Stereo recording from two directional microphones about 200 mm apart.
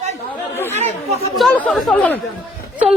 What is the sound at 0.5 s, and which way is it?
Chatter, 10° left (ahead or behind).